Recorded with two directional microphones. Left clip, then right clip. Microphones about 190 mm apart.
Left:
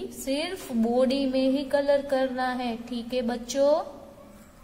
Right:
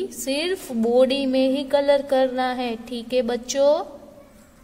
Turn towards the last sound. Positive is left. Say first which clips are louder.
# right 4 dB
turn(degrees=-50)  # may be behind; listen again after turning